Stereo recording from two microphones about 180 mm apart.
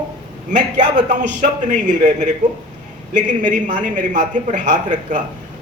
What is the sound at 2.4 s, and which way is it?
A man's voice, 45° right (ahead or behind).